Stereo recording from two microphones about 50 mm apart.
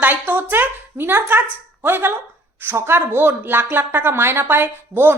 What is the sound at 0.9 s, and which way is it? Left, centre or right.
A woman's voice, right.